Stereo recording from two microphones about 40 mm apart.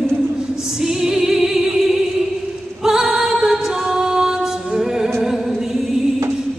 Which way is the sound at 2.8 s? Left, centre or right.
Centre.